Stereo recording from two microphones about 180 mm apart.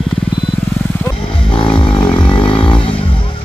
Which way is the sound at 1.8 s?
30° left (ahead or behind).